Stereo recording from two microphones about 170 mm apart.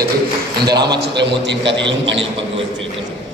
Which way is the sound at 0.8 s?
80° right.